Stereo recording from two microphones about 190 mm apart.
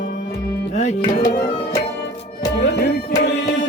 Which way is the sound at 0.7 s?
40° left (ahead or behind).